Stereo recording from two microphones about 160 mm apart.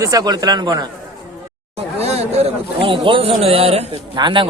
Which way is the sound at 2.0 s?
40° right (ahead or behind).